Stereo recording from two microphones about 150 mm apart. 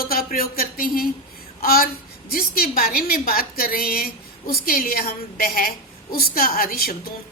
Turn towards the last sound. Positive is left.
turn(degrees=80)